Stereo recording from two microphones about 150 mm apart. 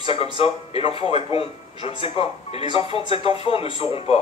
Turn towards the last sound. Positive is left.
turn(degrees=40)  # may be behind; listen again after turning